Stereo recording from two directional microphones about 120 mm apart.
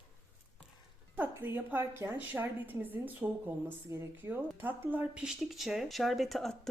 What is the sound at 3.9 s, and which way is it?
A woman's voice, 25° right (ahead or behind).